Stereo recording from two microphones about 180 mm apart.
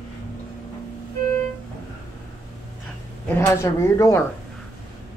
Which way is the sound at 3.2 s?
15° left (ahead or behind).